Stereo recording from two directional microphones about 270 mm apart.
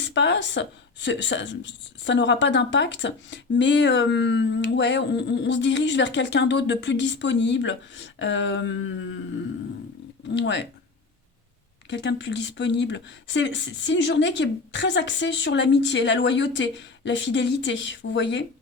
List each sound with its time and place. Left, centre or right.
0.0 s speech: left
8.2 s a sound: left
10.3 s speech: left
11.9 s speech: left